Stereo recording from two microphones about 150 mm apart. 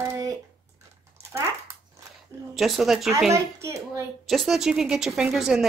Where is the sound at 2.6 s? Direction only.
Centre (ahead or behind).